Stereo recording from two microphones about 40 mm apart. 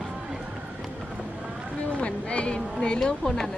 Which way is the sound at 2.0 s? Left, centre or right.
Left.